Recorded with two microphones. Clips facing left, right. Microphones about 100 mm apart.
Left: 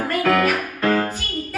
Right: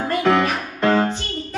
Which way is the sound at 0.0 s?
25° right (ahead or behind).